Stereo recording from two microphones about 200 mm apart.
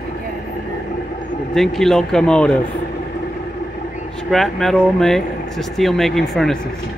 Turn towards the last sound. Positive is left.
turn(degrees=5)  # may be behind; listen again after turning